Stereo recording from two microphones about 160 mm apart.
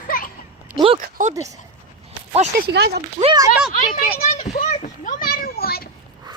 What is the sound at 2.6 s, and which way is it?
Speech, 90° right.